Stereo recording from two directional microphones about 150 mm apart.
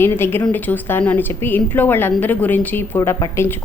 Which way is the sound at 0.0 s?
15° left (ahead or behind).